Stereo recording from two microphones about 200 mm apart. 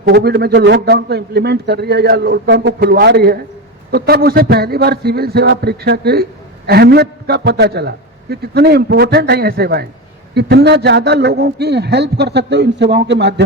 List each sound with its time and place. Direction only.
0.0 s a man's voice: 55° right (ahead or behind)